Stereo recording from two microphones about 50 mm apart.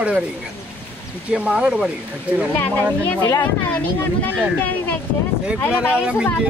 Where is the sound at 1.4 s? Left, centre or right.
Centre.